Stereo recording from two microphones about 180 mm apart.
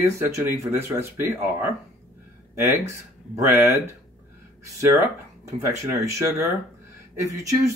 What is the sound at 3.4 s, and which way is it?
Speech, 15° right (ahead or behind).